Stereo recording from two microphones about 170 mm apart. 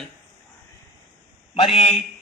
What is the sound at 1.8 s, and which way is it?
Speech, 35° left (ahead or behind).